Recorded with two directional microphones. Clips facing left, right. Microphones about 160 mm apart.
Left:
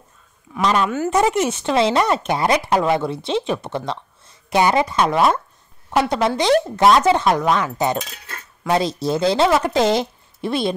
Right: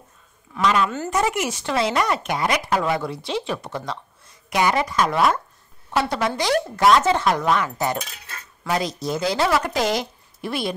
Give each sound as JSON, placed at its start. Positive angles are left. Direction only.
{"t": 0.6, "sound": "speech", "side_deg": 35}
{"t": 0.8, "sound": "a woman's voice", "side_deg": 15}
{"t": 1.2, "sound": "speech", "side_deg": 25}